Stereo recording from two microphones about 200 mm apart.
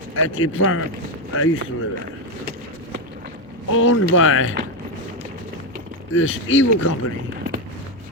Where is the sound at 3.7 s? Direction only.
90° left.